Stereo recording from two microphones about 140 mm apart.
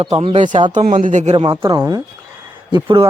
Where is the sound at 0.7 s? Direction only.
65° right (ahead or behind).